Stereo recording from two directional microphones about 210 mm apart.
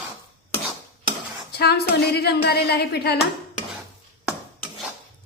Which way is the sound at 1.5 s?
50° left (ahead or behind).